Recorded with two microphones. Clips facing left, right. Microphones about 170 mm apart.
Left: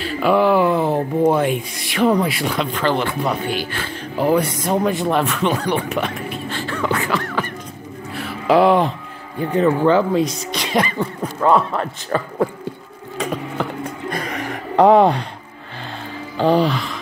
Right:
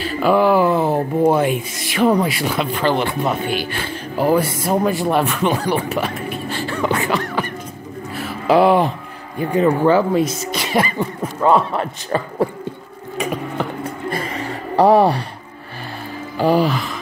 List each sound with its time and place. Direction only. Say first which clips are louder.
0.0 s speech: right 1 dB; centre (ahead or behind)
4.2 s speech: right 1 dB; 5° right (ahead or behind)
6.7 s a sound: right 1 dB; 20° right (ahead or behind)
8.2 s a sound: even; centre (ahead or behind)
9.4 s a man's voice: right 1 dB; 10° right (ahead or behind)
14.8 s speech: left 1 dB; 10° right (ahead or behind)
16.3 s speech: even; 10° right (ahead or behind)